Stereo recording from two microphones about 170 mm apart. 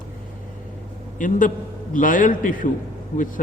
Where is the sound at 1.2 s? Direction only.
50° left (ahead or behind).